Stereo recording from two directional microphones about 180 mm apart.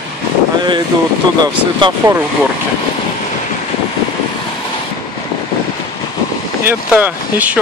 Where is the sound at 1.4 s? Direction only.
20° right (ahead or behind).